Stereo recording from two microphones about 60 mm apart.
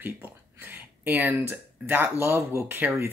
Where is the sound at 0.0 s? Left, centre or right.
Right.